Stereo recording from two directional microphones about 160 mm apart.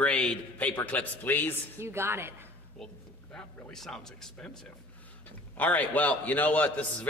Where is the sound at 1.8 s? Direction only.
15° right (ahead or behind).